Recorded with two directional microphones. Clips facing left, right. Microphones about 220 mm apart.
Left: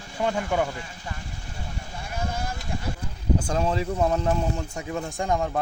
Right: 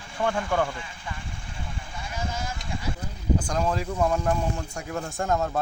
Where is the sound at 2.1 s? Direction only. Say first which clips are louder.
Left 2 dB; 55° left (ahead or behind).